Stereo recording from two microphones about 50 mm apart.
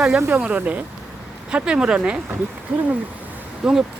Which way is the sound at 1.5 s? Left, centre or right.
Centre.